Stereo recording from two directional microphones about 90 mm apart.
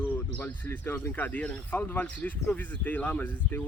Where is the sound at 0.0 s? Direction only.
20° left (ahead or behind).